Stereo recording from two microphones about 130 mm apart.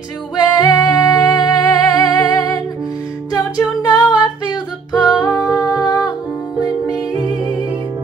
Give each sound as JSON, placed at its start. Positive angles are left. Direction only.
{"t": 0.4, "sound": "music", "side_deg": 30}